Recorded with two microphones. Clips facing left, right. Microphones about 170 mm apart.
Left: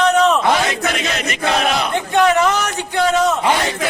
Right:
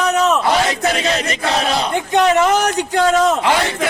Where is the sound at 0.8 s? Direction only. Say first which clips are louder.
Right 3 dB; 35° right (ahead or behind).